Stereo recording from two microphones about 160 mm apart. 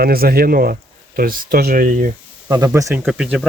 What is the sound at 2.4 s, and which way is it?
Speech, 25° right (ahead or behind).